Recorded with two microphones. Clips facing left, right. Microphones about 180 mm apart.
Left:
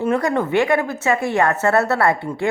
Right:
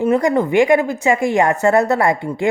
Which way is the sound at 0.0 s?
15° right (ahead or behind).